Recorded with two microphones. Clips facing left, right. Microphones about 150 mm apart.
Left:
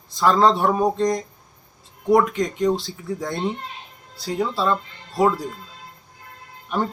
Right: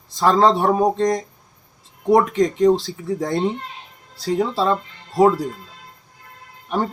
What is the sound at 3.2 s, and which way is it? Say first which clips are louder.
Speech: right 5 dB; 35° right (ahead or behind).